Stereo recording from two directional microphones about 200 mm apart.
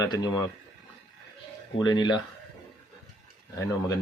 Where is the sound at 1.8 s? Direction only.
20° left (ahead or behind).